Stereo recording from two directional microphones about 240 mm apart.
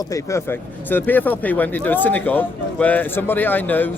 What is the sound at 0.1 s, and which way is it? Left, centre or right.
Speech, centre.